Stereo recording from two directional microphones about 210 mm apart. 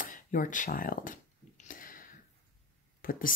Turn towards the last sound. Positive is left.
turn(degrees=40)  # may be behind; listen again after turning